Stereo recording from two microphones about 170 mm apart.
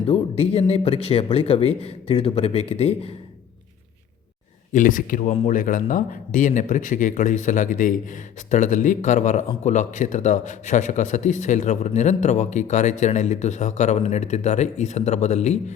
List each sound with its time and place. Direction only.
0.0 s speech: 35° left (ahead or behind)
4.7 s speech: 50° left (ahead or behind)